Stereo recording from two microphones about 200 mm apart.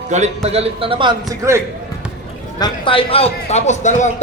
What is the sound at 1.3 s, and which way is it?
Speech, 15° right (ahead or behind).